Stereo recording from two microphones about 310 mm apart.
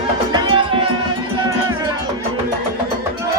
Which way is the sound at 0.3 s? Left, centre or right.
Centre.